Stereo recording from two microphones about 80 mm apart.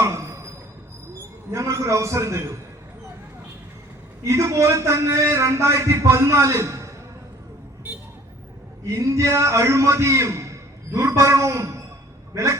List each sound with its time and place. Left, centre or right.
0.0 s a sound: right
1.5 s a man's voice: right
4.2 s a man's voice: right
9.0 s a man's voice: right